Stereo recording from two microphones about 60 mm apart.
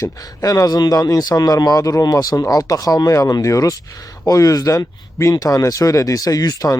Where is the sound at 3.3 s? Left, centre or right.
Left.